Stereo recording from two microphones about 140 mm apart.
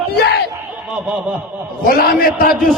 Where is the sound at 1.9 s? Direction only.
90° left.